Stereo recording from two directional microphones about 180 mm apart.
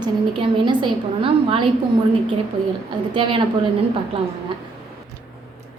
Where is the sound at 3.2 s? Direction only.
30° right (ahead or behind).